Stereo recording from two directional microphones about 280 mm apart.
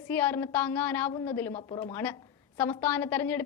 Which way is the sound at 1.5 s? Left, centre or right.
Centre.